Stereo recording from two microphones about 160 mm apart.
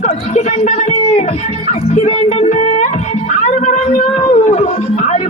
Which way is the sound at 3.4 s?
45° left (ahead or behind).